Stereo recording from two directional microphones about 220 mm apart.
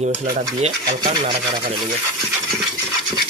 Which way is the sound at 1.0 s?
20° right (ahead or behind).